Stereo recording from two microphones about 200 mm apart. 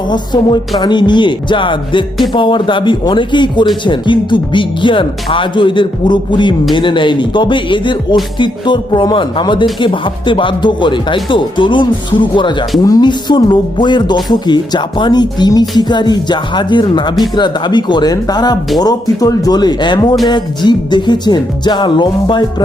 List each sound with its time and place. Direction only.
0.8 s speech: 20° left (ahead or behind)